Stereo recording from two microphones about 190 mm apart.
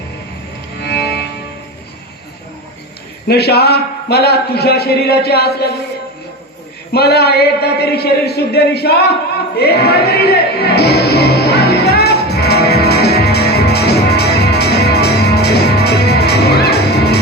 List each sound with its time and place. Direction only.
0.8 s music: 60° left (ahead or behind)
3.2 s a man's voice: 60° left (ahead or behind)
6.9 s a man's voice: 55° left (ahead or behind)
9.6 s music: 55° left (ahead or behind)